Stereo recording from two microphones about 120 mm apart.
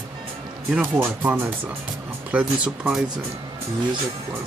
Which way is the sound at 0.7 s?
15° right (ahead or behind).